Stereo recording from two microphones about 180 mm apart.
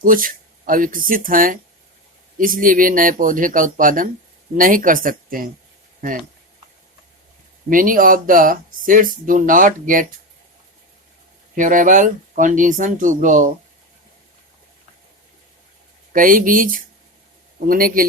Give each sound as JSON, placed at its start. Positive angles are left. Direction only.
{"t": 0.0, "sound": "speech", "side_deg": -50}
{"t": 7.7, "sound": "speech", "side_deg": -50}
{"t": 11.5, "sound": "speech", "side_deg": -45}
{"t": 16.1, "sound": "speech", "side_deg": -50}